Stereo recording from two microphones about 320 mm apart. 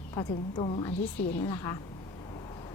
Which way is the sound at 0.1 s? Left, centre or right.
Centre.